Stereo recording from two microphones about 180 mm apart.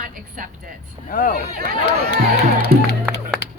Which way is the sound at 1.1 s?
50° left (ahead or behind).